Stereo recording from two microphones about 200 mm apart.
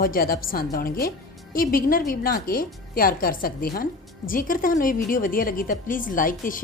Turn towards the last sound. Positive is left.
turn(degrees=45)  # may be behind; listen again after turning